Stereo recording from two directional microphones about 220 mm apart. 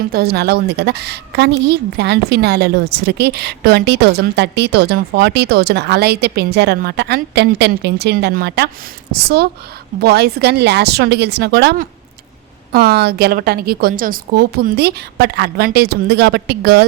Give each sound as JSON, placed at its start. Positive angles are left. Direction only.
{"t": 0.1, "sound": "a woman's voice", "side_deg": -45}